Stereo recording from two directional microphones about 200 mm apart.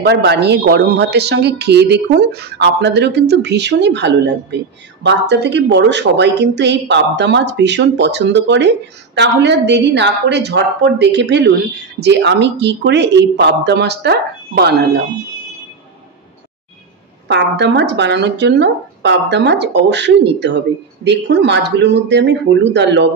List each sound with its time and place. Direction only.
0.0 s a woman's voice: 55° right (ahead or behind)
17.3 s a woman's voice: 60° right (ahead or behind)